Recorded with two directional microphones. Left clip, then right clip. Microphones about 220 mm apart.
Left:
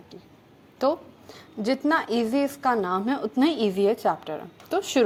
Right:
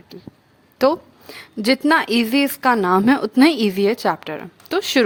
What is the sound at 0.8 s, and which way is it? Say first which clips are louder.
A woman's voice: right 7 dB; 60° right (ahead or behind).